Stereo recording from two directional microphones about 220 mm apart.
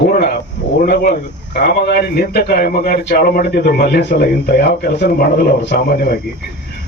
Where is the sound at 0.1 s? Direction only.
45° left (ahead or behind).